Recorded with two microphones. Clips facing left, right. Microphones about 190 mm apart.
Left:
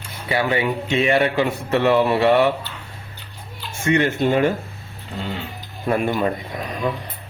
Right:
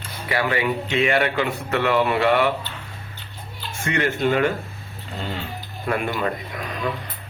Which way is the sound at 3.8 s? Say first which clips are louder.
Left 4 dB; 25° left (ahead or behind).